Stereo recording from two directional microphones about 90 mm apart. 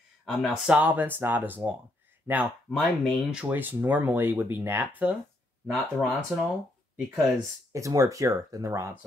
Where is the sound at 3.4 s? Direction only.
20° right (ahead or behind).